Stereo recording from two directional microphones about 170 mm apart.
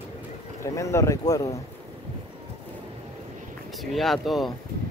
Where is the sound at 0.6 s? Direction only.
15° left (ahead or behind).